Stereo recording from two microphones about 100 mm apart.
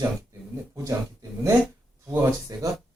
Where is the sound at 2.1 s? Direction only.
30° right (ahead or behind).